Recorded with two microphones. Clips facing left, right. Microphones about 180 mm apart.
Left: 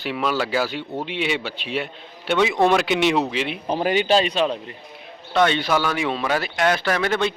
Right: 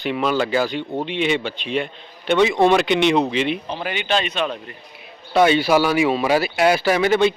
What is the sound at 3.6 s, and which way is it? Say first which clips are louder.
Speech: left 5 dB; 40° left (ahead or behind).